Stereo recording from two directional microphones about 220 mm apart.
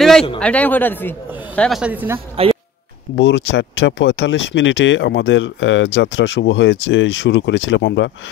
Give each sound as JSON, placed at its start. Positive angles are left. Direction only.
{"t": 0.4, "sound": "a man's voice", "side_deg": 5}
{"t": 2.1, "sound": "a woman's voice", "side_deg": -25}
{"t": 3.2, "sound": "speech", "side_deg": 55}